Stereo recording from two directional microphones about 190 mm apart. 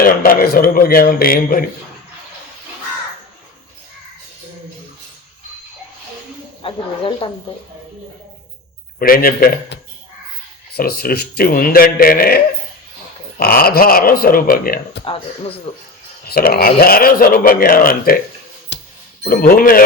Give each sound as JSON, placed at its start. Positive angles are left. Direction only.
{"t": 0.0, "sound": "a man's voice", "side_deg": 50}
{"t": 6.6, "sound": "speech", "side_deg": 25}
{"t": 9.0, "sound": "a man's voice", "side_deg": 50}
{"t": 10.8, "sound": "a man's voice", "side_deg": 55}
{"t": 13.4, "sound": "a man's voice", "side_deg": 50}
{"t": 15.0, "sound": "speech", "side_deg": 30}
{"t": 16.3, "sound": "a man's voice", "side_deg": 50}
{"t": 18.7, "sound": "music", "side_deg": 65}
{"t": 19.3, "sound": "a man's voice", "side_deg": 50}